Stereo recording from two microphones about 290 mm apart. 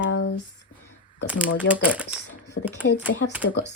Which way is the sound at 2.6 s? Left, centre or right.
Left.